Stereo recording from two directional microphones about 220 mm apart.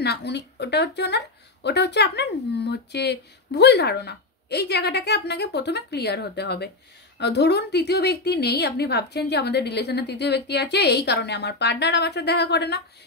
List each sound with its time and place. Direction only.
0.0 s speech: 50° left (ahead or behind)